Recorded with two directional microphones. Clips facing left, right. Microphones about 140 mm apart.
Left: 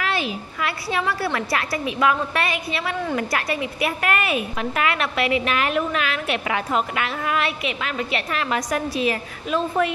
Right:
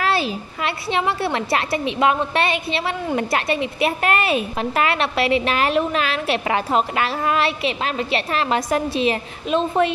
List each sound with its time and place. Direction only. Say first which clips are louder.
0.0 s a woman's voice: right 4 dB; 35° right (ahead or behind)